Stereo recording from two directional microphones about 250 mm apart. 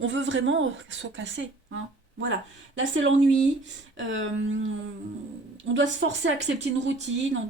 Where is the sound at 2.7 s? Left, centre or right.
Right.